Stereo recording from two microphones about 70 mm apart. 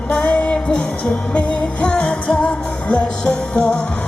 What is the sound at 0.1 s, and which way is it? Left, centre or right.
Music, centre.